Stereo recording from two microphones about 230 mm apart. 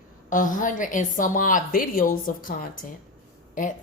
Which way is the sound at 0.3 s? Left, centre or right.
Left.